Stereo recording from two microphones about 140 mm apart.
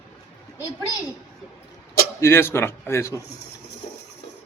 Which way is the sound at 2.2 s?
15° left (ahead or behind).